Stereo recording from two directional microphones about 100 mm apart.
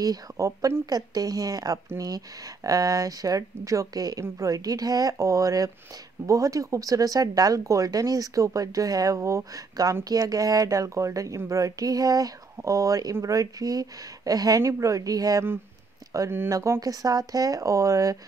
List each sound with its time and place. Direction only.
0.0 s a woman's voice: 35° right (ahead or behind)